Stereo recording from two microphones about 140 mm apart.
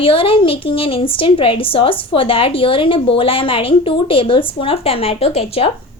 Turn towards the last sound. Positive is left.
turn(degrees=45)  # may be behind; listen again after turning